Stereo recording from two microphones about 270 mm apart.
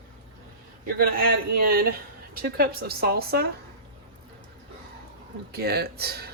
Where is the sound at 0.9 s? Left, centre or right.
Right.